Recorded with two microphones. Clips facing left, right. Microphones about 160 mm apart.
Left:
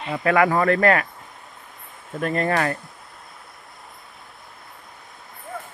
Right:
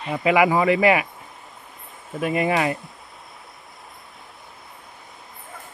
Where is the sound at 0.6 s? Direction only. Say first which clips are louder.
Even; 5° right (ahead or behind).